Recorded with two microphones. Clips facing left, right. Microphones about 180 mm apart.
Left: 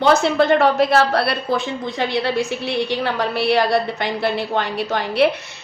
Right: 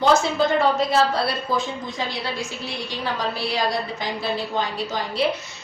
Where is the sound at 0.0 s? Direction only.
65° left (ahead or behind).